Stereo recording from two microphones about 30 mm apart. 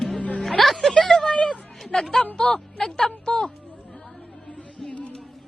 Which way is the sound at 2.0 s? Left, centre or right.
Centre.